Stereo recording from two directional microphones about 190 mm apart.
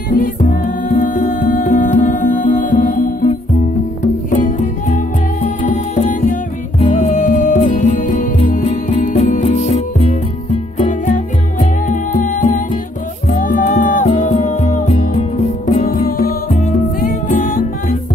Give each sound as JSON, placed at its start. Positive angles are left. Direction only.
{"t": 0.1, "sound": "music", "side_deg": 45}